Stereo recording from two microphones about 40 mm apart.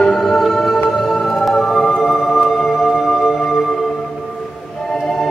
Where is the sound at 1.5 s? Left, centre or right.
Centre.